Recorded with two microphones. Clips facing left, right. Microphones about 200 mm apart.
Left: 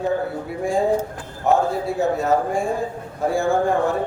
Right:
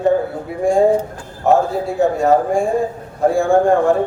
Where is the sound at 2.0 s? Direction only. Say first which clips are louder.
Right 6 dB; centre (ahead or behind).